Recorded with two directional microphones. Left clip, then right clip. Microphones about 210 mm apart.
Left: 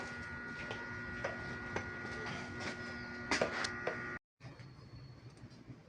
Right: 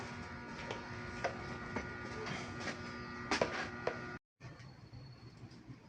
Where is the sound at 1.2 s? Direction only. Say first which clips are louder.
Right 3 dB; 55° right (ahead or behind).